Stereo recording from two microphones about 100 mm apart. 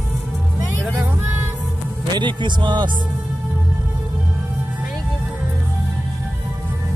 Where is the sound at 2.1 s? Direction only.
50° right (ahead or behind).